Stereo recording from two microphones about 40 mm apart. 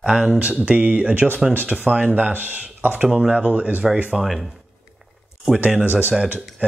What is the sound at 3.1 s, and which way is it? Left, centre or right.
Speech, right.